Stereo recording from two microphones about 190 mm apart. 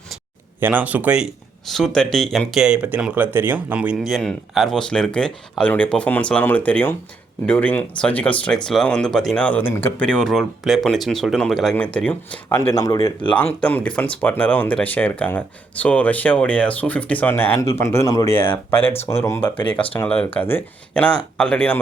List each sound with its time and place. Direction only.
0.6 s speech: 10° right (ahead or behind)